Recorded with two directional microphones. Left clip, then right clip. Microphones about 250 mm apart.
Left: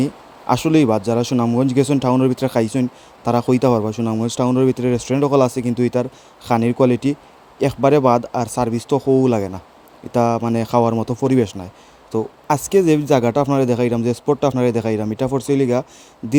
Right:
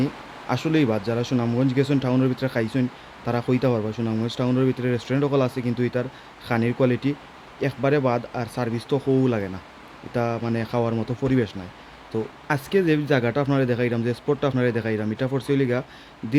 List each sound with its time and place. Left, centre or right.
0.0 s speech: left